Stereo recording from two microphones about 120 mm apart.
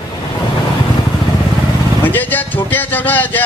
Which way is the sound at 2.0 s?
15° left (ahead or behind).